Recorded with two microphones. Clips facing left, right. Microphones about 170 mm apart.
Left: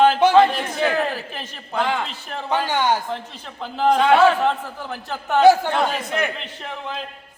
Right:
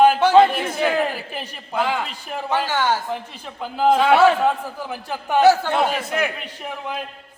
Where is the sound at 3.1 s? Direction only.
10° right (ahead or behind).